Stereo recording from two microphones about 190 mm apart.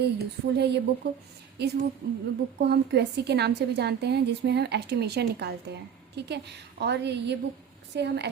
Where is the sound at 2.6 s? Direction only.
60° right (ahead or behind).